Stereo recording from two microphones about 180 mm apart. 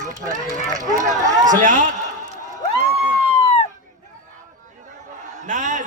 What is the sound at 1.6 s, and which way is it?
Speech, 45° right (ahead or behind).